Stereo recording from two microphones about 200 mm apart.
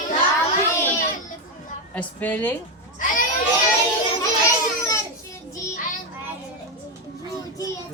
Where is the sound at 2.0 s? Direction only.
10° left (ahead or behind).